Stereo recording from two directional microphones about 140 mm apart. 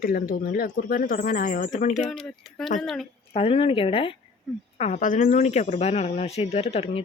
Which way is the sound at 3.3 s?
45° left (ahead or behind).